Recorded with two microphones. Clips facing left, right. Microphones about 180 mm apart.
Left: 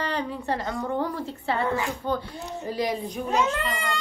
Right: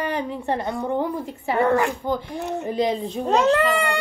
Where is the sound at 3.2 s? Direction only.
70° right (ahead or behind).